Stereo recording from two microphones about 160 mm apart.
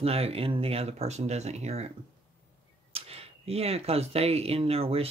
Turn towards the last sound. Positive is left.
turn(degrees=-40)  # may be behind; listen again after turning